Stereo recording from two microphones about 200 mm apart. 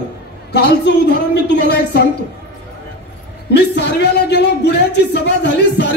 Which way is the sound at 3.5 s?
55° left (ahead or behind).